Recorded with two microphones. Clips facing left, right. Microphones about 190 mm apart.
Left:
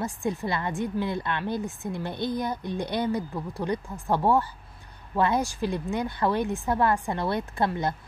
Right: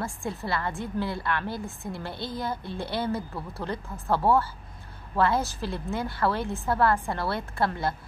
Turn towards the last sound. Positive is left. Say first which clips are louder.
# left 1 dB
turn(degrees=20)  # may be behind; listen again after turning